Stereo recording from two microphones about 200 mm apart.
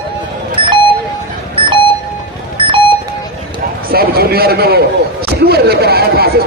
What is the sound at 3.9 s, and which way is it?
A man's voice, 50° right (ahead or behind).